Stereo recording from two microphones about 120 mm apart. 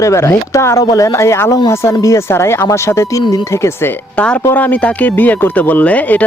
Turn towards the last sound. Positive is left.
turn(degrees=10)  # may be behind; listen again after turning